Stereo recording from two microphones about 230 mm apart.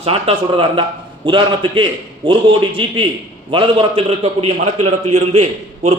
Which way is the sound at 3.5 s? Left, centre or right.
Right.